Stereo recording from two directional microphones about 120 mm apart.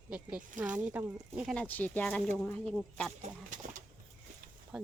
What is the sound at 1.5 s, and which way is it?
Speech, 10° left (ahead or behind).